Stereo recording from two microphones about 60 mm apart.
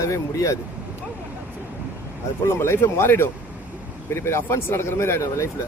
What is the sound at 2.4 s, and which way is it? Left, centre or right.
Speech, left.